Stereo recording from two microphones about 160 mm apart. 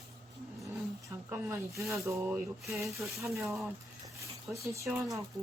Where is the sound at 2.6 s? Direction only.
Centre (ahead or behind).